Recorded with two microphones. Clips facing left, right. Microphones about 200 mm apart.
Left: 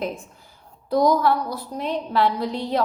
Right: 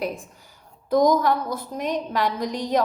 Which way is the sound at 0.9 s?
45° right (ahead or behind).